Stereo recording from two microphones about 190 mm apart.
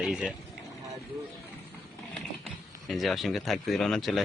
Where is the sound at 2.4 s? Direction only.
Centre (ahead or behind).